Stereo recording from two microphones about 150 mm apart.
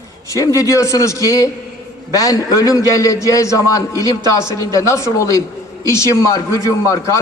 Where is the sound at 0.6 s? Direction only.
20° left (ahead or behind).